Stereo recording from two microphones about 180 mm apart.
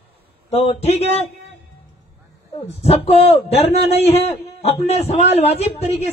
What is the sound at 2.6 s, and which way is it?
A man's voice, 35° left (ahead or behind).